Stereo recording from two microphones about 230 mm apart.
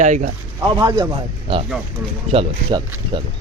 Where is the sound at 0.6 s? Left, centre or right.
Centre.